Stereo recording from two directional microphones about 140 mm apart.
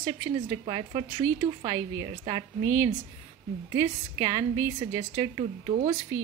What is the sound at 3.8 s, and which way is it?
A woman's voice, 25° right (ahead or behind).